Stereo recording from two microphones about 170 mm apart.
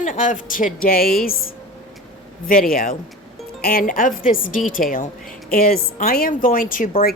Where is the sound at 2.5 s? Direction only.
55° left (ahead or behind).